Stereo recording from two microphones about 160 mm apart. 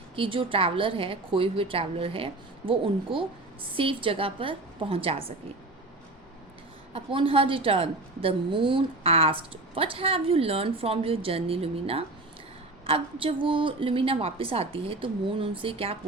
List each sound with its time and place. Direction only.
0.2 s a woman's voice: 35° right (ahead or behind)
6.9 s a woman's voice: 35° right (ahead or behind)